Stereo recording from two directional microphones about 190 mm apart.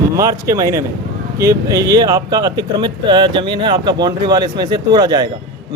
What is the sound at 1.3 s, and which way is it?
Speech, 15° right (ahead or behind).